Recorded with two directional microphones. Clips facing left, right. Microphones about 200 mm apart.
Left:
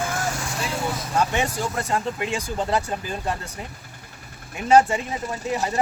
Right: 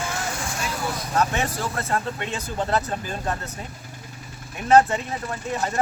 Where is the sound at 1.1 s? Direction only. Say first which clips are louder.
Even; 10° left (ahead or behind).